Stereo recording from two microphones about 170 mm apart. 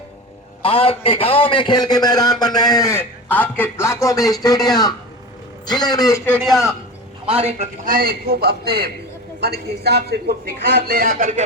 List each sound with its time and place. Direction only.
0.6 s a man's voice: 35° left (ahead or behind); by 6.3 s 15° left (ahead or behind)
6.4 s speech: centre (ahead or behind)
7.3 s a man's voice: 40° right (ahead or behind)
7.9 s a man's voice: 60° right (ahead or behind)